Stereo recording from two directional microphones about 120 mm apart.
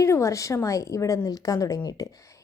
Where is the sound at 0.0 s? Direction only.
25° left (ahead or behind).